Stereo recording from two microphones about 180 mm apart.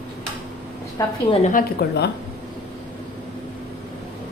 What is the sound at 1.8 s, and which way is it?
Speech, 60° left (ahead or behind).